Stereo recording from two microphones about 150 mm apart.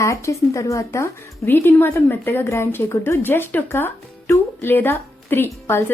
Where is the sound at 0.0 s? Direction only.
20° left (ahead or behind).